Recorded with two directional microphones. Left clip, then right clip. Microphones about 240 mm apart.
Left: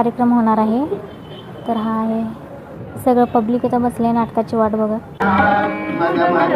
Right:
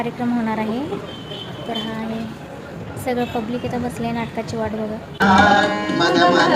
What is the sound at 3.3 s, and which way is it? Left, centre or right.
A woman's voice, centre.